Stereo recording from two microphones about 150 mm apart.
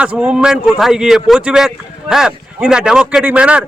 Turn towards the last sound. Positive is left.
turn(degrees=-10)  # may be behind; listen again after turning